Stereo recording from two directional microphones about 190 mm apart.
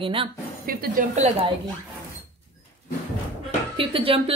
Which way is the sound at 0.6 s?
45° right (ahead or behind).